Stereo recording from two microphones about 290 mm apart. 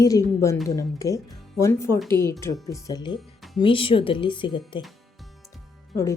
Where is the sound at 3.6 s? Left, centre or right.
Centre.